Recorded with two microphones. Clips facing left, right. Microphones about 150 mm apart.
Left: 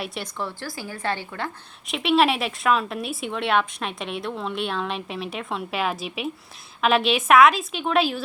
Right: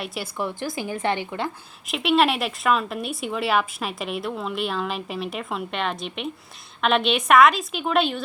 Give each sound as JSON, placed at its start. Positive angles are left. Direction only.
{"t": 0.0, "sound": "speech", "side_deg": 0}
{"t": 0.3, "sound": "speech", "side_deg": -15}
{"t": 1.9, "sound": "speech", "side_deg": 0}